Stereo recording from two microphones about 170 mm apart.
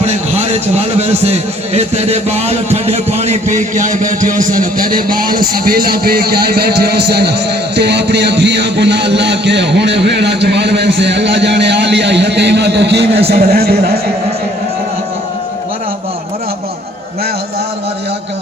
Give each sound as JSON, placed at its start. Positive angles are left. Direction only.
{"t": 0.0, "sound": "a man's voice", "side_deg": -40}
{"t": 13.1, "sound": "a man's voice", "side_deg": -35}
{"t": 13.5, "sound": "a man's voice", "side_deg": -65}